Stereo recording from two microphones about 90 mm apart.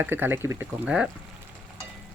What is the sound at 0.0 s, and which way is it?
Speech, 25° right (ahead or behind).